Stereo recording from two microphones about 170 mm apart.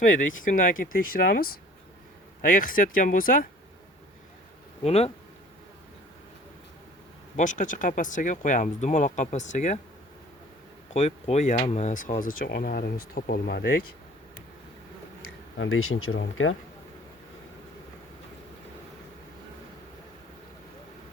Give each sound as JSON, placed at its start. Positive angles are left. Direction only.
{"t": 0.1, "sound": "speech", "side_deg": 50}
{"t": 4.8, "sound": "speech", "side_deg": 35}
{"t": 7.3, "sound": "speech", "side_deg": 50}
{"t": 10.9, "sound": "speech", "side_deg": 40}
{"t": 16.1, "sound": "speech", "side_deg": 90}